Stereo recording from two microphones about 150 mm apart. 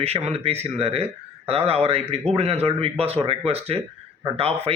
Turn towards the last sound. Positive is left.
turn(degrees=-40)  # may be behind; listen again after turning